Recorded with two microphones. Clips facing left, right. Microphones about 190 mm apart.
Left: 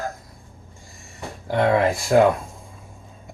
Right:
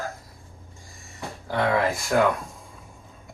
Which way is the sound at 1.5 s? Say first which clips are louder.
Left 4 dB; 25° left (ahead or behind).